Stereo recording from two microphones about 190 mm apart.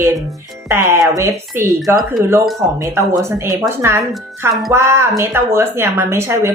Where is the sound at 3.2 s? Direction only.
15° right (ahead or behind).